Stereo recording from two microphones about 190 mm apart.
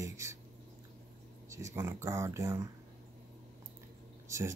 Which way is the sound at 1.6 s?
15° right (ahead or behind).